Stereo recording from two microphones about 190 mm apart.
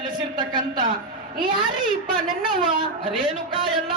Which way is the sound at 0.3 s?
20° right (ahead or behind).